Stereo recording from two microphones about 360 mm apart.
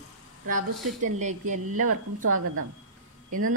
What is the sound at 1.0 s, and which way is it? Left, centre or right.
A woman's voice, centre.